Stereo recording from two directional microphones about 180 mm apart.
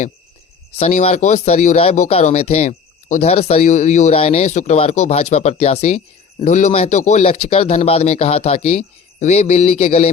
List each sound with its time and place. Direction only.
0.8 s speech: 35° left (ahead or behind)